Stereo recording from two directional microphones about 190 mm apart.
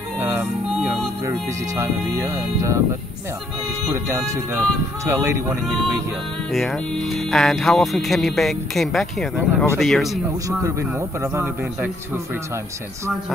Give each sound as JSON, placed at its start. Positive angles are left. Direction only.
{"t": 0.2, "sound": "music", "side_deg": -10}
{"t": 1.8, "sound": "a man's voice", "side_deg": -15}
{"t": 3.9, "sound": "a man's voice", "side_deg": -15}
{"t": 6.5, "sound": "speech", "side_deg": 0}
{"t": 10.6, "sound": "a man's voice", "side_deg": -15}